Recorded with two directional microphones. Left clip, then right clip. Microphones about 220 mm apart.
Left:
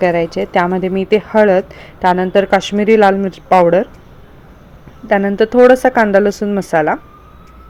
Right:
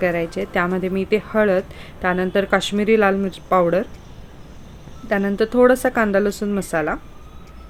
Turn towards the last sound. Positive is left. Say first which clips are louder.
# left 8 dB
turn(degrees=15)  # may be behind; listen again after turning